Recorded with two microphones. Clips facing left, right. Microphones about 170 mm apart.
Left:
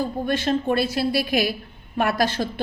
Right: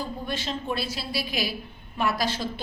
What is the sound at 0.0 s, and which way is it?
A woman's voice, 55° left (ahead or behind).